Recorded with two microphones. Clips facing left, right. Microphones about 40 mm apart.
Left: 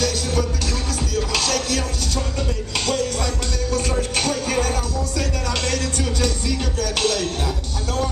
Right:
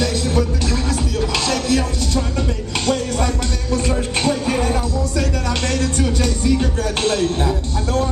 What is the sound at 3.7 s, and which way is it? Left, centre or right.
Music, right.